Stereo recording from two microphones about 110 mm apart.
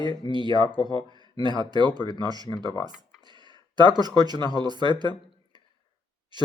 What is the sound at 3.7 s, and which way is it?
Speech, 40° right (ahead or behind).